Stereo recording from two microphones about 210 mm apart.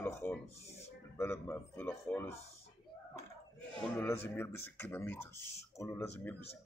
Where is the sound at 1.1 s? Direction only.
10° left (ahead or behind).